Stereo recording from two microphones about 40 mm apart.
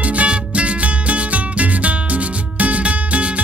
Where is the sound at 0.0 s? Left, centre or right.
Right.